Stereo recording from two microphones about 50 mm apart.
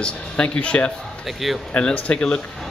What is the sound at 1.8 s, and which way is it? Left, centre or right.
Speech, centre.